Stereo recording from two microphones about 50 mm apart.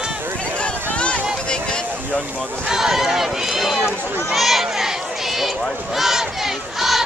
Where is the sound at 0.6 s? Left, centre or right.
Left.